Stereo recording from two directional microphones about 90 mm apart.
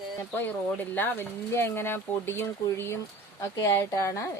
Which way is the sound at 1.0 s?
25° left (ahead or behind).